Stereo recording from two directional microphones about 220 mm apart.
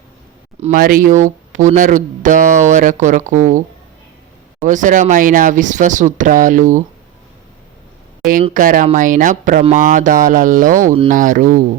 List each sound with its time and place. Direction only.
0.6 s speech: 40° right (ahead or behind)
4.6 s speech: 35° right (ahead or behind)
8.4 s speech: 35° right (ahead or behind)